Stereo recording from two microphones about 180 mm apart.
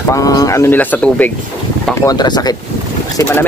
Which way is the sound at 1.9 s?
20° left (ahead or behind).